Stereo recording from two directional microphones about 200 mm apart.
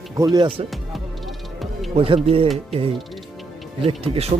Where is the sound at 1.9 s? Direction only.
30° right (ahead or behind).